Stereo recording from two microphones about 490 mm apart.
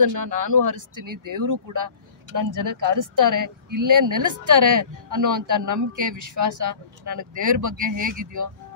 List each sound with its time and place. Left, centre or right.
0.0 s speech: right